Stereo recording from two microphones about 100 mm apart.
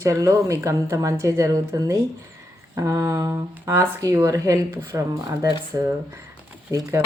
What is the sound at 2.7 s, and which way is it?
Speech, 30° right (ahead or behind).